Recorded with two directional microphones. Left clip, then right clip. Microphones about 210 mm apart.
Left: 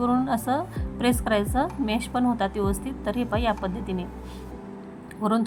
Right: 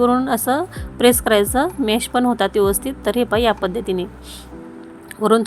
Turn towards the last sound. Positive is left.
turn(degrees=-20)  # may be behind; listen again after turning